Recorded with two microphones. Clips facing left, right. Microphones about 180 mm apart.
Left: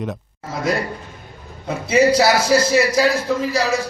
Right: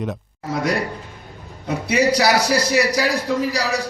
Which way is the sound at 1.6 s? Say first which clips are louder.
Left 3 dB; 25° left (ahead or behind).